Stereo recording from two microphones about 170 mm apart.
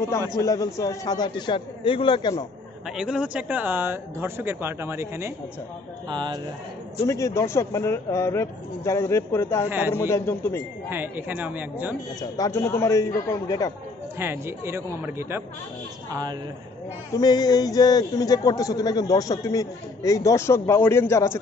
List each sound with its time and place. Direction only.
0.4 s speech: 20° left (ahead or behind)
2.9 s speech: 5° right (ahead or behind)
6.0 s a man's voice: 25° right (ahead or behind)
7.0 s speech: 20° left (ahead or behind)
9.7 s speech: 10° right (ahead or behind)
9.9 s speech: 15° left (ahead or behind)
10.9 s speech: 10° right (ahead or behind)
12.2 s speech: 20° left (ahead or behind)
14.1 s a man's voice: 15° right (ahead or behind)
17.1 s speech: 25° left (ahead or behind)